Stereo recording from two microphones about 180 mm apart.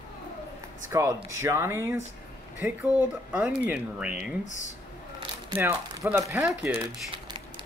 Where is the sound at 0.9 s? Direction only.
15° right (ahead or behind).